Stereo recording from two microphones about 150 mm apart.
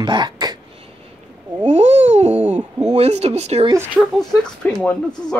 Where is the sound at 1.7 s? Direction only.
45° right (ahead or behind).